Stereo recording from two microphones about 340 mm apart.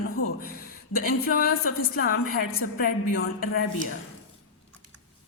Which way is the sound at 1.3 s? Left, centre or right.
Left.